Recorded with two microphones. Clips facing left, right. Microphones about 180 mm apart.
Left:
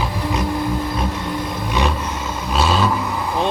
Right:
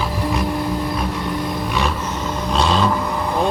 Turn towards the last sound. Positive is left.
turn(degrees=5)  # may be behind; listen again after turning